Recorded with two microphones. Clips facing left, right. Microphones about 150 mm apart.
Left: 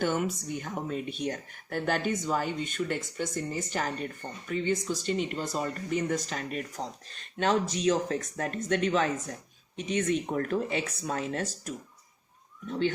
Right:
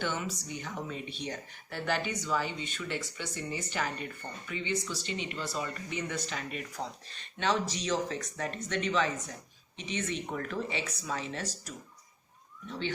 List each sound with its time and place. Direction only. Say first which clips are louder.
0.0 s speech: left 6 dB; 50° left (ahead or behind)